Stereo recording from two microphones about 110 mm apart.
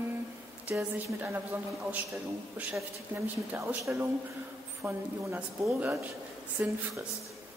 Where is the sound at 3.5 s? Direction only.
25° right (ahead or behind).